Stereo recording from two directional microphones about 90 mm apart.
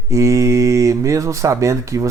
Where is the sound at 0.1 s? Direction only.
35° right (ahead or behind).